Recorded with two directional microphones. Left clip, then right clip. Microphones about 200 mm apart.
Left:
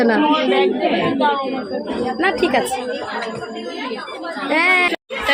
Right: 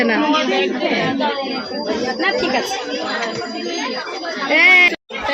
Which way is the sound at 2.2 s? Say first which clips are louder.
Left 2 dB; 20° left (ahead or behind).